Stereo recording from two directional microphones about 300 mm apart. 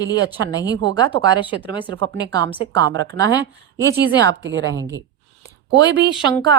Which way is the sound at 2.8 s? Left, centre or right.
Right.